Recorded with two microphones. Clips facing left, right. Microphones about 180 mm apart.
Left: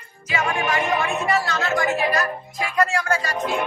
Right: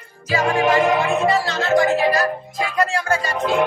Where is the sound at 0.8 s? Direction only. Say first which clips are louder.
Right 5 dB; 70° right (ahead or behind).